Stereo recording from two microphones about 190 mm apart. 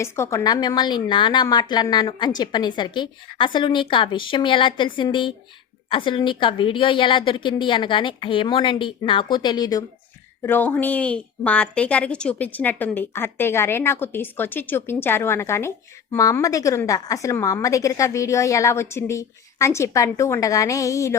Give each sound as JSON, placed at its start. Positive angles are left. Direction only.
{"t": 0.0, "sound": "a woman's voice", "side_deg": 15}
{"t": 10.4, "sound": "a woman's voice", "side_deg": 10}